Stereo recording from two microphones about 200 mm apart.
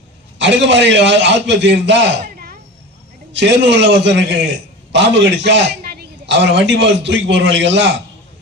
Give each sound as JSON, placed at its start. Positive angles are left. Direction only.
{"t": 0.3, "sound": "a man's voice", "side_deg": -65}